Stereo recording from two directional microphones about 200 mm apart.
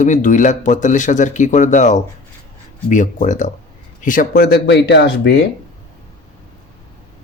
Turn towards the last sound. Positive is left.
turn(degrees=55)  # may be behind; listen again after turning